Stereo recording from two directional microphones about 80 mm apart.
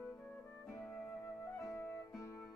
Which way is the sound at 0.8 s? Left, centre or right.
Centre.